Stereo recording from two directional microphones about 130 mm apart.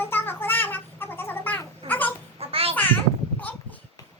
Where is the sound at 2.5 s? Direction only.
45° right (ahead or behind).